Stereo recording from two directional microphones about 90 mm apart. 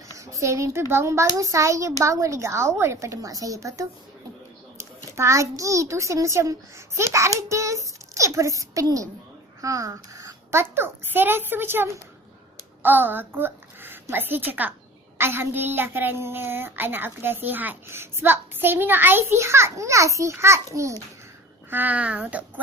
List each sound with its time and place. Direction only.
0.2 s a child's voice: 35° right (ahead or behind)
5.1 s a child's voice: 35° right (ahead or behind)
21.7 s speech: 20° right (ahead or behind)